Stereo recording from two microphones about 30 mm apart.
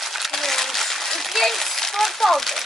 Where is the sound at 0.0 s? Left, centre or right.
Centre.